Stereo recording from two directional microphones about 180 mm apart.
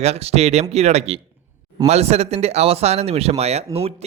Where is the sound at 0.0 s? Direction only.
35° right (ahead or behind).